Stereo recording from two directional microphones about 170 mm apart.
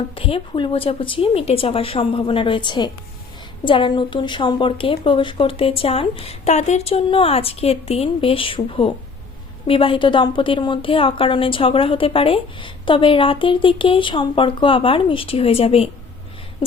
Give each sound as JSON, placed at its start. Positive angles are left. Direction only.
{"t": 0.2, "sound": "a woman's voice", "side_deg": 30}